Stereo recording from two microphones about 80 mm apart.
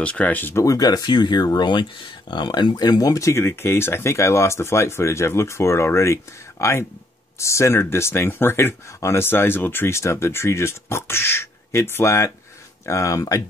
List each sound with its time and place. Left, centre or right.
0.0 s speech: centre
0.6 s speech: left
1.6 s speech: left